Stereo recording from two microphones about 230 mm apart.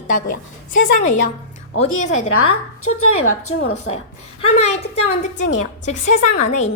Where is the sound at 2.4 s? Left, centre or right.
Left.